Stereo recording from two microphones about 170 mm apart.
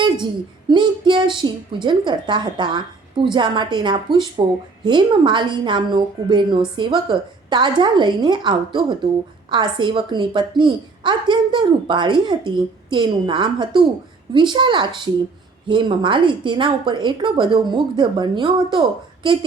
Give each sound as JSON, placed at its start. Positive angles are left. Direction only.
{"t": 0.7, "sound": "a woman's voice", "side_deg": -25}